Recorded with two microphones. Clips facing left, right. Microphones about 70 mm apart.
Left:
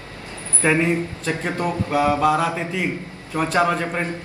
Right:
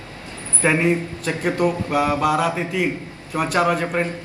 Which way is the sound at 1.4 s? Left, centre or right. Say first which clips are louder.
Right 6 dB; centre.